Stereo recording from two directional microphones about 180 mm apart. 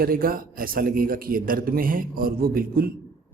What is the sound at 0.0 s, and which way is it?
A man's voice, 55° right (ahead or behind).